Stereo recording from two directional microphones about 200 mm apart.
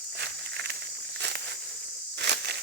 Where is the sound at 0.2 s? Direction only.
55° right (ahead or behind).